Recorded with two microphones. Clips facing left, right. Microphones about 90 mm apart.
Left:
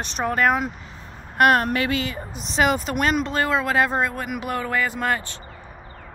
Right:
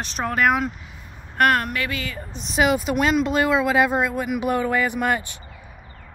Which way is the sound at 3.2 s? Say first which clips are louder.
Right 3 dB; 15° right (ahead or behind).